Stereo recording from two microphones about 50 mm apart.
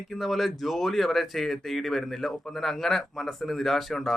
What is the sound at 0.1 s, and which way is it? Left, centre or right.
Speech, centre.